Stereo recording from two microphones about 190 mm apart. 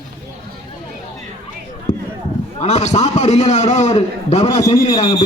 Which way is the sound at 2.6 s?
35° left (ahead or behind).